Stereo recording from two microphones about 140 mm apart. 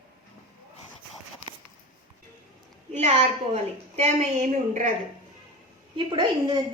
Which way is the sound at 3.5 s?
65° right (ahead or behind).